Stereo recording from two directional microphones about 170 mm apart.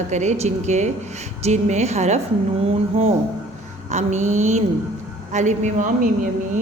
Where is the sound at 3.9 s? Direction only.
45° right (ahead or behind).